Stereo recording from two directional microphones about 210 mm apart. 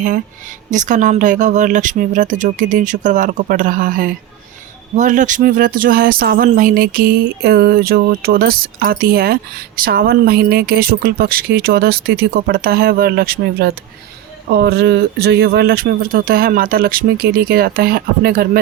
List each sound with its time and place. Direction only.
0.7 s speech: 35° right (ahead or behind)